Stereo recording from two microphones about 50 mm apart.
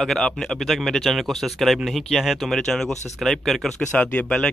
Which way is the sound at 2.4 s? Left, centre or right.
Centre.